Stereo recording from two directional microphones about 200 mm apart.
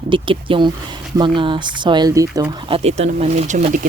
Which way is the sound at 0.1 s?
25° right (ahead or behind).